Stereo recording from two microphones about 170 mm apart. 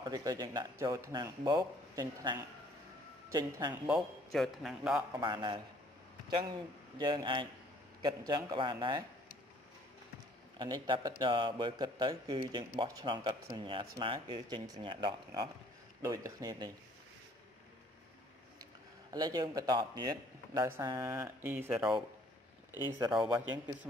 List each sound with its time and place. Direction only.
0.0 s a man's voice: 20° right (ahead or behind)
3.7 s a man's voice: 5° right (ahead or behind)
5.2 s a man's voice: 25° right (ahead or behind)
7.0 s a man's voice: 25° right (ahead or behind)
10.6 s a man's voice: 25° right (ahead or behind)
18.6 s a man's voice: 20° right (ahead or behind)
22.8 s a man's voice: 20° right (ahead or behind)